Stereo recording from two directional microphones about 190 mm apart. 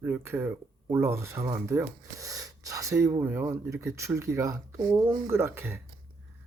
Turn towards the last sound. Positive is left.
turn(degrees=-10)  # may be behind; listen again after turning